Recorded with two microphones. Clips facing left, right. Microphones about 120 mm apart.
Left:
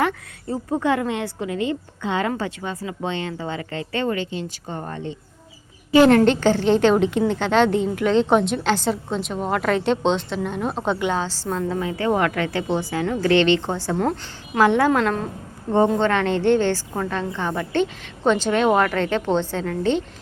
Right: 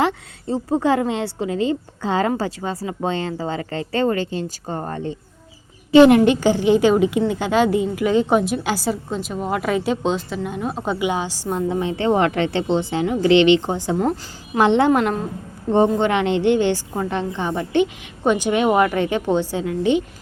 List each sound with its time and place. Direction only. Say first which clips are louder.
0.0 s a woman's voice: right 2 dB; 25° right (ahead or behind); by 5.1 s 40° right (ahead or behind)
5.9 s a woman's voice: right 3 dB; 15° right (ahead or behind)